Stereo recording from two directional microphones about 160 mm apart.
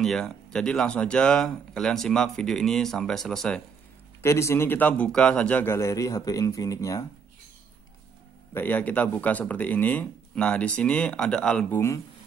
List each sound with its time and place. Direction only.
0.0 s speech: 5° left (ahead or behind)
4.2 s speech: 15° left (ahead or behind)
8.5 s speech: 10° left (ahead or behind)